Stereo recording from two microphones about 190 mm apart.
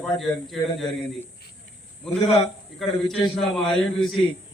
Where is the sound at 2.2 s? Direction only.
30° left (ahead or behind).